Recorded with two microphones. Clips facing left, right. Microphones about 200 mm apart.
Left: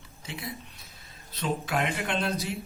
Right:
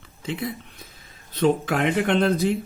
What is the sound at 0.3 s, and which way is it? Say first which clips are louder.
Speech: right 9 dB; 55° right (ahead or behind).